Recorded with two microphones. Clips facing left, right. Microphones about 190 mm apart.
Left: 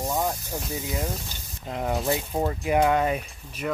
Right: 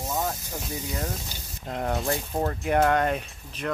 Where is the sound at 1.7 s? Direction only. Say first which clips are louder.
Left 1 dB; centre (ahead or behind).